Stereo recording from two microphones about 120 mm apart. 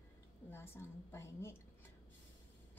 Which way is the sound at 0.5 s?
20° left (ahead or behind).